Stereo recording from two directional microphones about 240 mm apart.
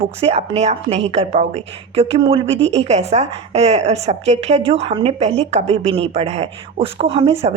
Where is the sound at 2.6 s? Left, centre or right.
Right.